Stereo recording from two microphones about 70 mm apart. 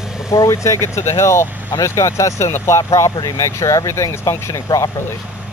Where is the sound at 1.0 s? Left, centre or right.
Left.